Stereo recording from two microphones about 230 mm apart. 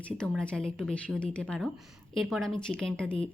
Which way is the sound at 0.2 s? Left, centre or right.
Centre.